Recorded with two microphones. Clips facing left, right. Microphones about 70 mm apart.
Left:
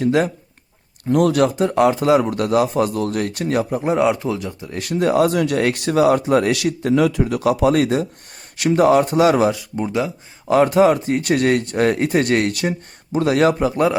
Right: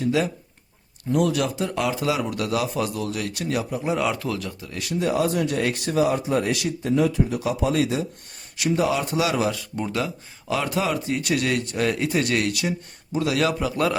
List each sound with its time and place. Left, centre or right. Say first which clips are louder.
0.0 s a man's voice: left 5 dB; left
4.7 s speech: left 6 dB; left
9.5 s speech: left 5 dB; centre
10.5 s a man's voice: left 11 dB; left